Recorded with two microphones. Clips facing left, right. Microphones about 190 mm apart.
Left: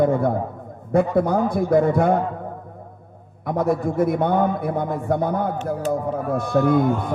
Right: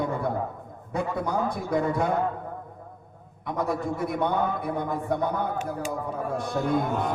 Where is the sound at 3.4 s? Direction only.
55° left (ahead or behind).